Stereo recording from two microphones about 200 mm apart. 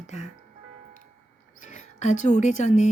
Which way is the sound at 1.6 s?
35° left (ahead or behind).